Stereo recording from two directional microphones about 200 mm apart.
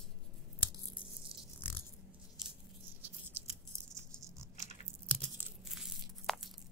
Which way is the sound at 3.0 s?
10° right (ahead or behind).